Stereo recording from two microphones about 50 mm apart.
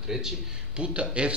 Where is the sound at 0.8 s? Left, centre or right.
Right.